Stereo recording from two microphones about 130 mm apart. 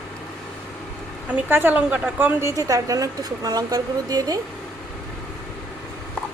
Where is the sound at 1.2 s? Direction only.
15° right (ahead or behind); by 4.4 s 30° right (ahead or behind).